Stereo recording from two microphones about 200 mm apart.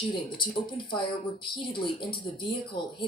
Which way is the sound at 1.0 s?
25° left (ahead or behind).